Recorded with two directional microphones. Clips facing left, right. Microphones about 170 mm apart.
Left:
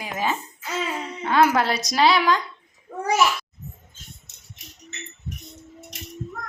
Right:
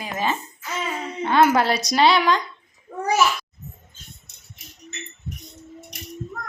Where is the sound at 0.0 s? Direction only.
10° left (ahead or behind).